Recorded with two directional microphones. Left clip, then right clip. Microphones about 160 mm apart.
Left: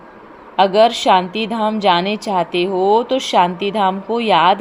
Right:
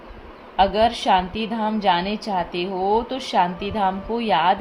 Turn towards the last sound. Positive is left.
turn(degrees=45)  # may be behind; listen again after turning